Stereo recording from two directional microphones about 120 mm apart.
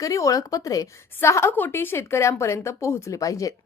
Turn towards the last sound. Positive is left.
turn(degrees=30)  # may be behind; listen again after turning